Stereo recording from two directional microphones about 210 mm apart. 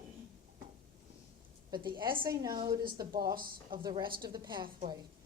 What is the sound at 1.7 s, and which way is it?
A woman's voice, 20° right (ahead or behind).